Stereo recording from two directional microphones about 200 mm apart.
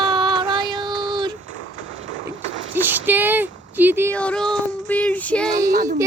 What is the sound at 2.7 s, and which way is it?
Speech, 10° right (ahead or behind).